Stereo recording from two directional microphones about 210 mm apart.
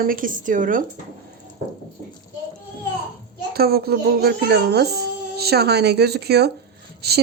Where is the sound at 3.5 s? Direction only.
45° right (ahead or behind).